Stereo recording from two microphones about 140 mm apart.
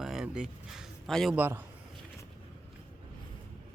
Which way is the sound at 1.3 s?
15° right (ahead or behind).